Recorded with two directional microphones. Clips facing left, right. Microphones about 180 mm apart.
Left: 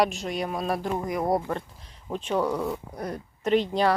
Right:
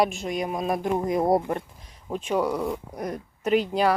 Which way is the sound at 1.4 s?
15° right (ahead or behind).